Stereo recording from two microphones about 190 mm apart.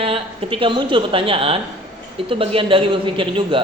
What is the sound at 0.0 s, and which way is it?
A woman's voice, 30° right (ahead or behind).